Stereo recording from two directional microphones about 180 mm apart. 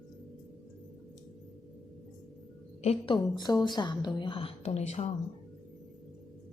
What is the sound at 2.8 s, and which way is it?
A woman's voice, 30° left (ahead or behind).